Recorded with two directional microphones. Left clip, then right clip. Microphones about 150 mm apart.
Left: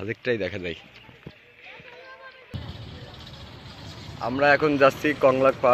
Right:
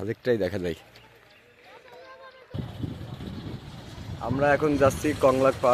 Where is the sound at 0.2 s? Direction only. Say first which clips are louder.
Right 2 dB; 30° right (ahead or behind).